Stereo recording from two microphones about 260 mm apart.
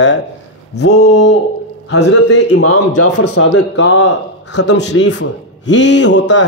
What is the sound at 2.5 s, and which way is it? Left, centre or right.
Speech, left.